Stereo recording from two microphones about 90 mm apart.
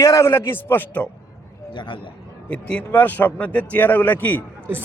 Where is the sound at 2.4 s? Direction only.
15° left (ahead or behind).